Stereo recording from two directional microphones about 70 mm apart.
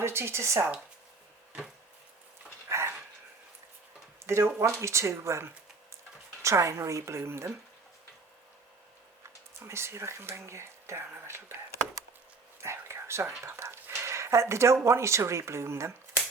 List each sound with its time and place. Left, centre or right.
0.0 s speech: right
2.6 s dog: right
4.3 s a woman's voice: right
9.6 s speech: right
12.5 s dog: right
13.4 s speech: right